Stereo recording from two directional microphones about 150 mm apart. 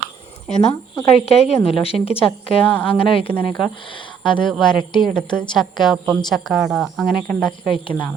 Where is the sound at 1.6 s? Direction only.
40° left (ahead or behind).